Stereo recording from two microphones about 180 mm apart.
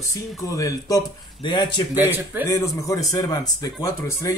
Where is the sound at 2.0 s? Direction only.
10° right (ahead or behind).